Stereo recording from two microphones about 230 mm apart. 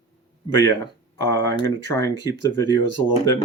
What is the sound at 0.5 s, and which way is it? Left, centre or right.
Speech, centre.